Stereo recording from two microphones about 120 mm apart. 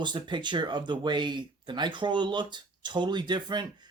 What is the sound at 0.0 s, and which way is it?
Speech, 40° right (ahead or behind).